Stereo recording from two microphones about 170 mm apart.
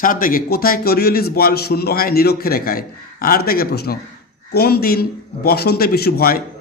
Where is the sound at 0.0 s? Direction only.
55° left (ahead or behind).